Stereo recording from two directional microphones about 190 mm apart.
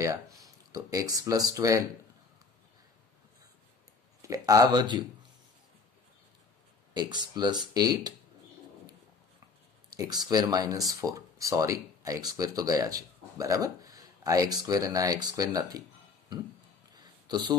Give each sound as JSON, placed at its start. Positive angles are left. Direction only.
{"t": 0.7, "sound": "speech", "side_deg": -20}
{"t": 4.2, "sound": "speech", "side_deg": -20}
{"t": 6.9, "sound": "speech", "side_deg": -20}
{"t": 9.9, "sound": "speech", "side_deg": -20}
{"t": 16.9, "sound": "a sound", "side_deg": -20}